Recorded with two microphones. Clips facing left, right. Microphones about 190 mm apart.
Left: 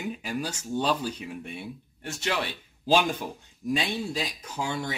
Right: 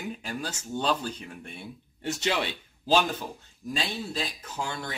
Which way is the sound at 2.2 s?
25° right (ahead or behind).